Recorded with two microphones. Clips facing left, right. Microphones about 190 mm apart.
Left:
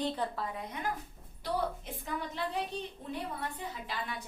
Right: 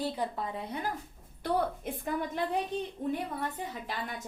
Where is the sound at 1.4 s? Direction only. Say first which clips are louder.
Right 4 dB; 55° right (ahead or behind).